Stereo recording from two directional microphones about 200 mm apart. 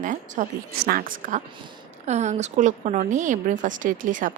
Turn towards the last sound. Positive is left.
turn(degrees=-40)  # may be behind; listen again after turning